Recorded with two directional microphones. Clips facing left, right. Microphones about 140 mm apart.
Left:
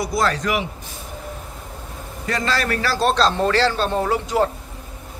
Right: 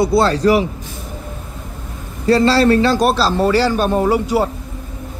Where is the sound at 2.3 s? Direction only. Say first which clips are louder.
Right 11 dB; 30° right (ahead or behind).